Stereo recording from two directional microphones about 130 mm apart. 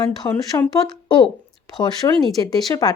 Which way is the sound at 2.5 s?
30° left (ahead or behind).